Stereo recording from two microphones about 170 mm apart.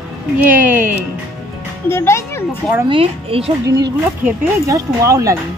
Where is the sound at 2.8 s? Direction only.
30° right (ahead or behind).